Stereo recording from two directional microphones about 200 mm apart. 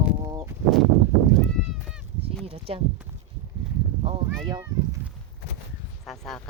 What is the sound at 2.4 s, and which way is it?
Speech, 30° right (ahead or behind).